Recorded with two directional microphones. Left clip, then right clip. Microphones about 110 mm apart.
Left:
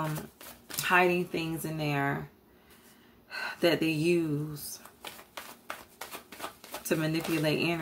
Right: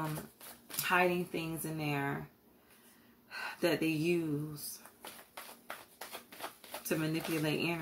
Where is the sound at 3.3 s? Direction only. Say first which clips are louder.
Left 6 dB; 30° left (ahead or behind).